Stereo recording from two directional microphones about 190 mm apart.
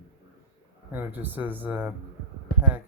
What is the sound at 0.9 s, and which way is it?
Speech, 10° right (ahead or behind).